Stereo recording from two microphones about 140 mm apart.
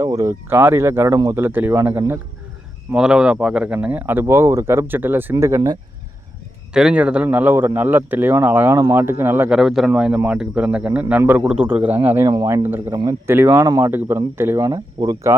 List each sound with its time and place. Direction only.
0.0 s speech: 25° right (ahead or behind)
2.9 s speech: 5° right (ahead or behind); by 5.8 s 25° right (ahead or behind)
6.7 s speech: 5° right (ahead or behind)
9.5 s a man's voice: centre (ahead or behind)
13.7 s speech: 25° right (ahead or behind)